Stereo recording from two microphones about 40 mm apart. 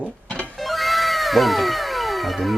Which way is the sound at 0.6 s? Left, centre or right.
Centre.